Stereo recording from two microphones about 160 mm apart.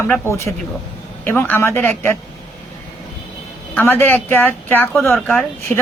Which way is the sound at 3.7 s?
15° left (ahead or behind).